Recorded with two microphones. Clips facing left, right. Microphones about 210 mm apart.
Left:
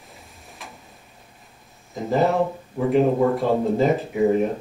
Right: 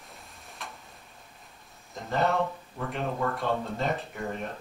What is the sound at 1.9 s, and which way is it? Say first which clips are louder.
Speech: left 7 dB; centre (ahead or behind).